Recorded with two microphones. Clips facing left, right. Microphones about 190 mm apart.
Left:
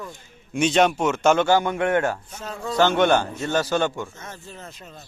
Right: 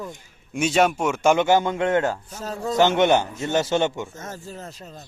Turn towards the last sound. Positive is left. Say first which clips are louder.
# right 3 dB
turn(degrees=-35)  # may be behind; listen again after turning